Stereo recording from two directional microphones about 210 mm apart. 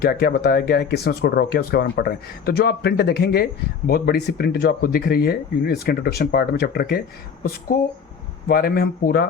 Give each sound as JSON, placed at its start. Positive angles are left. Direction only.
{"t": 0.0, "sound": "speech", "side_deg": 45}
{"t": 8.4, "sound": "speech", "side_deg": 45}